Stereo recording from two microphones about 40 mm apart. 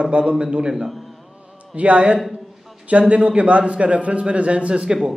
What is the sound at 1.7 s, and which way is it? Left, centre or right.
A man's voice, right.